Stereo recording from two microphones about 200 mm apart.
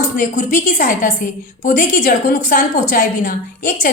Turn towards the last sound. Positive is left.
turn(degrees=45)  # may be behind; listen again after turning